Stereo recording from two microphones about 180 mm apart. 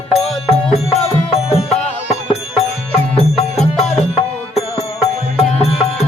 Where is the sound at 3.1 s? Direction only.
35° left (ahead or behind).